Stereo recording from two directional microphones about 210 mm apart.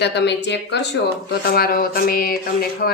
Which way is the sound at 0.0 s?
55° left (ahead or behind).